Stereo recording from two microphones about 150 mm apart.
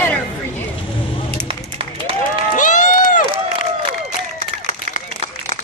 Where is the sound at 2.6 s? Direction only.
60° left (ahead or behind).